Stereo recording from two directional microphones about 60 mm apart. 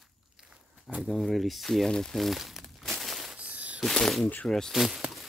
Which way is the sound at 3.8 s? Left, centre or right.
Centre.